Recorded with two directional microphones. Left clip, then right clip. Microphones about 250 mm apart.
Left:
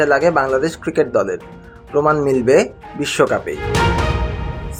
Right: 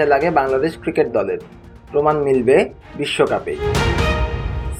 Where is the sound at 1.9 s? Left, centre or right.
Left.